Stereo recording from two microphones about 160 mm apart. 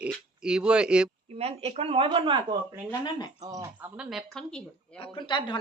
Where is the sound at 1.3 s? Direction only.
40° right (ahead or behind).